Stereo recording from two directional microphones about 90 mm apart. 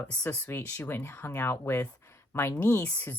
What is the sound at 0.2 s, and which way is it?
Speech, 20° left (ahead or behind).